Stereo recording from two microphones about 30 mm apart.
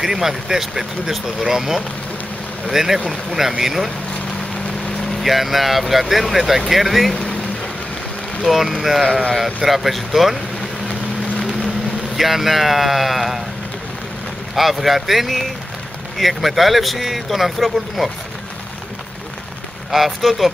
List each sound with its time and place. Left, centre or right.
0.0 s speech: centre
5.2 s speech: centre
8.5 s speech: centre
11.3 s vehicle: centre
12.2 s speech: centre
14.5 s speech: centre
19.9 s speech: centre